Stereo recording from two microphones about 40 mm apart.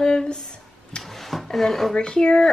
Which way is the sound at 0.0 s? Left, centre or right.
Left.